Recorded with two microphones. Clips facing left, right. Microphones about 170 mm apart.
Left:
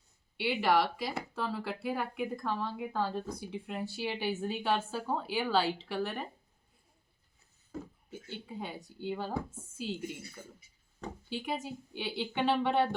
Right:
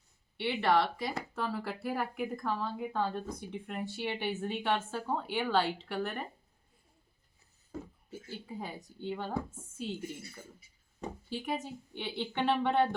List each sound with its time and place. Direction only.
0.3 s speech: 5° left (ahead or behind)
8.3 s speech: centre (ahead or behind)